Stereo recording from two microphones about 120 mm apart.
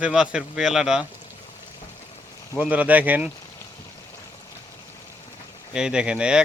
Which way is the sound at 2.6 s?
10° right (ahead or behind).